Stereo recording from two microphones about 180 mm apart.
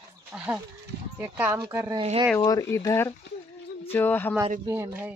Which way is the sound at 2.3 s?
15° left (ahead or behind).